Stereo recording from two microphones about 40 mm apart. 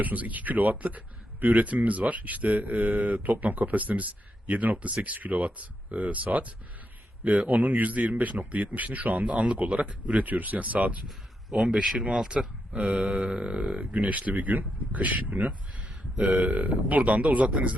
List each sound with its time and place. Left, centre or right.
0.0 s speech: right
11.5 s speech: right
12.7 s speech: right
13.1 s a sound: centre
13.7 s speech: right